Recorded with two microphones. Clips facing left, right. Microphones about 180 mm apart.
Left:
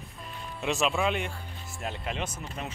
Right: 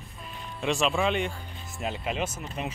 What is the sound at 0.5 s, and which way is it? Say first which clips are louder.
Speech: right 2 dB; 5° left (ahead or behind).